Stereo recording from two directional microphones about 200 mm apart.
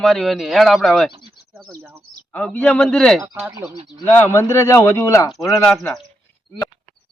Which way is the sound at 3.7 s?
25° right (ahead or behind).